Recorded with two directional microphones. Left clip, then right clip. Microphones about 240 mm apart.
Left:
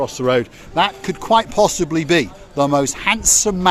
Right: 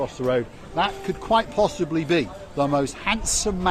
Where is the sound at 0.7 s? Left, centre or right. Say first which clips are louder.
Left 6 dB; left.